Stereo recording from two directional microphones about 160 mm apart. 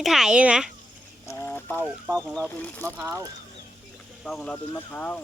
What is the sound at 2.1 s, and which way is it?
Speech, 5° left (ahead or behind).